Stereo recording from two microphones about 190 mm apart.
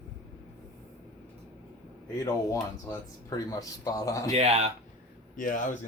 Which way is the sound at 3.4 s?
20° left (ahead or behind).